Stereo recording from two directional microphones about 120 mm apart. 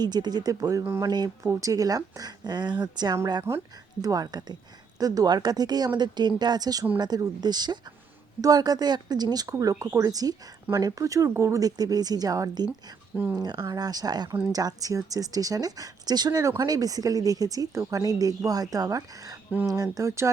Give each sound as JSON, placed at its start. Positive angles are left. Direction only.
{"t": 0.0, "sound": "speech", "side_deg": -35}
{"t": 3.5, "sound": "speech", "side_deg": -20}
{"t": 4.0, "sound": "speech", "side_deg": -30}